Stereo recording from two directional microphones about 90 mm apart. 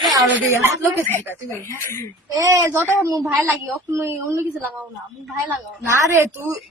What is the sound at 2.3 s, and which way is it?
A woman's voice, 40° right (ahead or behind).